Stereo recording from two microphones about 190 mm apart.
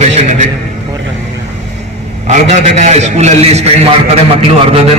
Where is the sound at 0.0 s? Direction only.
35° right (ahead or behind).